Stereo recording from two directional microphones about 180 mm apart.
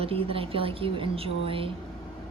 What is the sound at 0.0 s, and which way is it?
A woman's voice, 30° right (ahead or behind).